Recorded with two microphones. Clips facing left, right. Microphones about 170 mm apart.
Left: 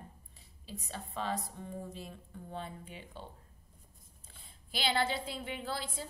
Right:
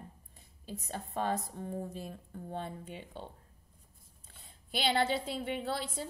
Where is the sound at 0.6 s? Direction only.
50° right (ahead or behind).